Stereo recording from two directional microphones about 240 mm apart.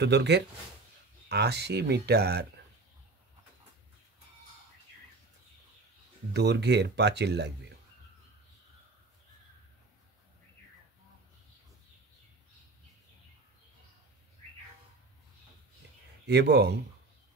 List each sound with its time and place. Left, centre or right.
0.0 s speech: right
6.3 s speech: right
16.3 s speech: right